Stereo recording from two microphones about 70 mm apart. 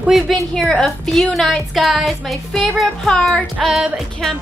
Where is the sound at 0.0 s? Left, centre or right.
Centre.